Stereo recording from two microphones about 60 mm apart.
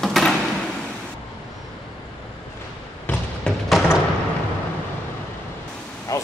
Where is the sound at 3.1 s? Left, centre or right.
Left.